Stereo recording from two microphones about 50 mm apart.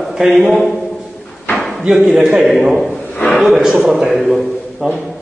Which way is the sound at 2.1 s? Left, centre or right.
Centre.